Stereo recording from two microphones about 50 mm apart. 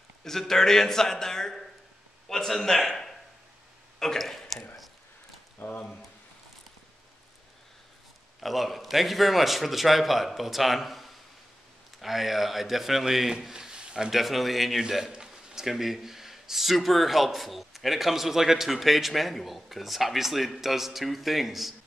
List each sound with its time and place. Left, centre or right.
0.2 s a man's voice: centre
5.6 s a sound: left
8.4 s speech: centre
14.1 s speech: centre